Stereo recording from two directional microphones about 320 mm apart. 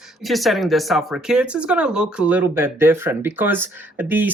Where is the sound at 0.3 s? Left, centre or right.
Centre.